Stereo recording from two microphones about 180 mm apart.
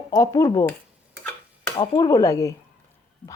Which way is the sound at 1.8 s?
20° left (ahead or behind).